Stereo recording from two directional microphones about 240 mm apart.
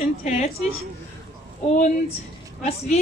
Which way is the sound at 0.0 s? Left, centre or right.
Left.